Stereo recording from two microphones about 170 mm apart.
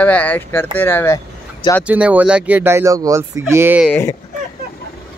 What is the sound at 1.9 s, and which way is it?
Speech, 10° right (ahead or behind).